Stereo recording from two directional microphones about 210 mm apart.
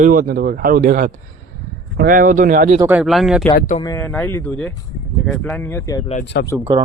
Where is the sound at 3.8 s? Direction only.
10° left (ahead or behind).